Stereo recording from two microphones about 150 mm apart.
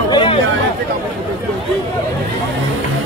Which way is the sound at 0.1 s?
35° left (ahead or behind).